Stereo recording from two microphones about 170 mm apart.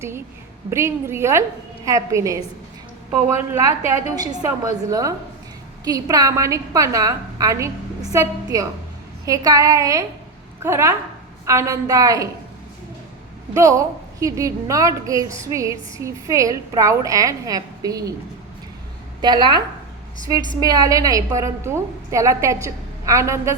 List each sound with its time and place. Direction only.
0.7 s a woman's voice: 15° right (ahead or behind)
13.5 s a woman's voice: 20° right (ahead or behind)
19.2 s a woman's voice: 25° right (ahead or behind)